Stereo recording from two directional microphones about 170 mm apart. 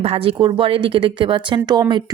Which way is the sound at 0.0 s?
35° right (ahead or behind).